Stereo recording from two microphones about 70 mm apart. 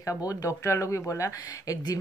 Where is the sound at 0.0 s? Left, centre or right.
Left.